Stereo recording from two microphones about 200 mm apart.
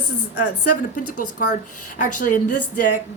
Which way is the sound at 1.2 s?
40° left (ahead or behind).